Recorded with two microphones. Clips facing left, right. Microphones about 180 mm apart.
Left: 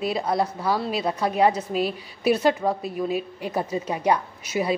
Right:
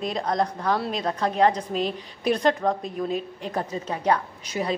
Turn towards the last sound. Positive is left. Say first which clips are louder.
# left 3 dB
turn(degrees=10)  # may be behind; listen again after turning